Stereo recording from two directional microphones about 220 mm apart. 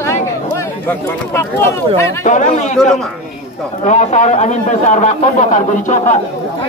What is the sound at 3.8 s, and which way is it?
A man's voice, 30° left (ahead or behind).